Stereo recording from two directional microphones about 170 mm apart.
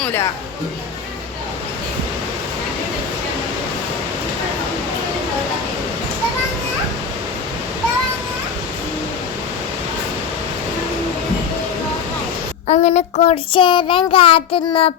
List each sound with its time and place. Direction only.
0.0 s speech: 15° left (ahead or behind)
12.6 s child singing: 40° left (ahead or behind)